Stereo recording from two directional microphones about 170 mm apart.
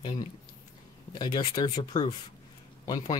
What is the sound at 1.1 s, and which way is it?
Speech, 25° left (ahead or behind).